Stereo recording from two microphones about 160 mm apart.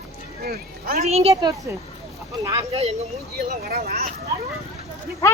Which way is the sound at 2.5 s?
40° right (ahead or behind).